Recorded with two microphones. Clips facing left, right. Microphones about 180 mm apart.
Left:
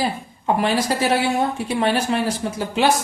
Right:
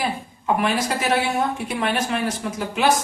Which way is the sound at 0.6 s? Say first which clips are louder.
Left 4 dB; 30° left (ahead or behind).